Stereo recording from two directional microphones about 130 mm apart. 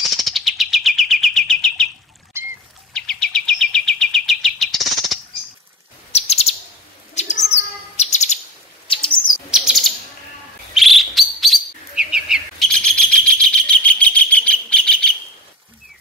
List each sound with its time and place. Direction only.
0.2 s chirp: centre (ahead or behind)
2.3 s squawk: 20° right (ahead or behind)
2.9 s chirp: 5° left (ahead or behind)
6.1 s chirp: 55° left (ahead or behind)
8.8 s bird: 45° left (ahead or behind)
9.5 s bird: centre (ahead or behind)